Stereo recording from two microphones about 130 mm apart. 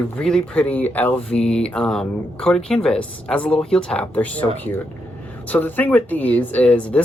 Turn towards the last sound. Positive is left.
turn(degrees=10)  # may be behind; listen again after turning